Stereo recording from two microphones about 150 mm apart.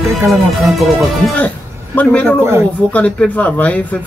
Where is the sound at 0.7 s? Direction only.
5° left (ahead or behind).